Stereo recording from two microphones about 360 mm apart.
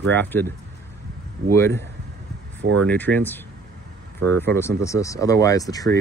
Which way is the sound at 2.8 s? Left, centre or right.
Centre.